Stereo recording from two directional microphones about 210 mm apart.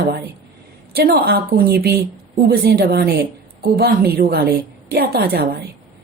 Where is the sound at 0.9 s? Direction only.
45° right (ahead or behind).